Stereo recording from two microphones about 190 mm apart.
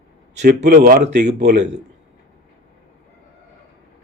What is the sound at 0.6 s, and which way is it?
Speech, 45° right (ahead or behind).